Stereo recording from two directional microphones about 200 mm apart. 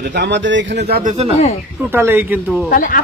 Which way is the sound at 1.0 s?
35° right (ahead or behind).